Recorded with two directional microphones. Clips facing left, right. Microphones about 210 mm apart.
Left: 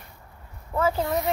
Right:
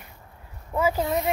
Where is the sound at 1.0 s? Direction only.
20° right (ahead or behind).